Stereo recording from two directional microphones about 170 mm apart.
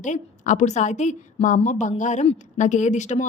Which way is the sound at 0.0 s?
45° left (ahead or behind).